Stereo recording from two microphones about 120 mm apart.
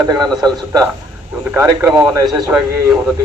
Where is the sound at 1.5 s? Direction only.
20° right (ahead or behind).